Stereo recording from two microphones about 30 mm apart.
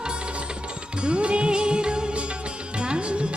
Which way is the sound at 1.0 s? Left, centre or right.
Right.